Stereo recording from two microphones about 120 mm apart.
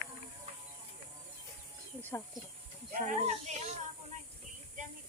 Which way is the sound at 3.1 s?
70° right (ahead or behind).